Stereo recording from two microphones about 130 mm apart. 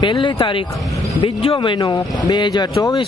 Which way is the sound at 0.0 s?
35° left (ahead or behind).